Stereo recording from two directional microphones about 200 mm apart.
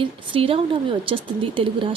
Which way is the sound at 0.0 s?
25° right (ahead or behind).